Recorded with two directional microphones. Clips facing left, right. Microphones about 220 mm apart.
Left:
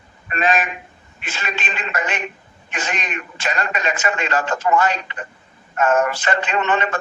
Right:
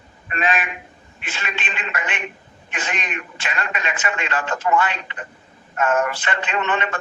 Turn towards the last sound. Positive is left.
turn(degrees=40)  # may be behind; listen again after turning